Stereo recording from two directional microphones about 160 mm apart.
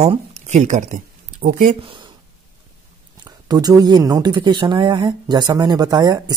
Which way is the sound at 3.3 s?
25° right (ahead or behind).